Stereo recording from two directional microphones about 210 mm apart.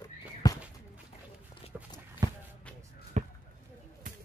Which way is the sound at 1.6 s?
30° left (ahead or behind).